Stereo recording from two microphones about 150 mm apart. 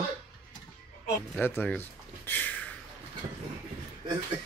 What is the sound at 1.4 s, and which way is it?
Speech, 10° left (ahead or behind).